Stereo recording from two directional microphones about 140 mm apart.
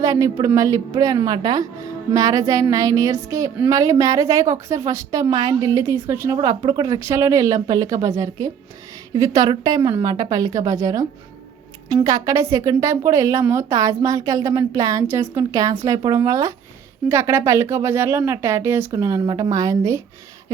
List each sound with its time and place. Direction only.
0.0 s a woman's voice: 25° right (ahead or behind)
6.3 s a woman's voice: 30° right (ahead or behind)